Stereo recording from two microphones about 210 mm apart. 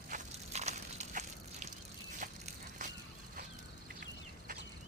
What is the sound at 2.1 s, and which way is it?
Biting, 40° right (ahead or behind).